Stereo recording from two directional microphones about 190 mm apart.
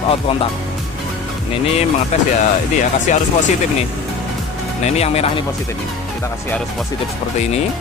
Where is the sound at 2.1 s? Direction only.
35° left (ahead or behind).